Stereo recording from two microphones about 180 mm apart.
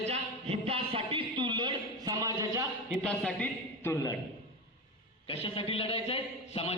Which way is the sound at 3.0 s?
5° left (ahead or behind).